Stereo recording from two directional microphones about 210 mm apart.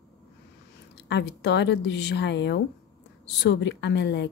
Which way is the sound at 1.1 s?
55° left (ahead or behind).